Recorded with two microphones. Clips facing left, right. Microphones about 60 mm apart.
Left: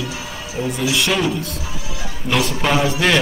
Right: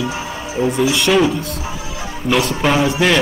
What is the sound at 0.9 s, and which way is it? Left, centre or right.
Speech, centre.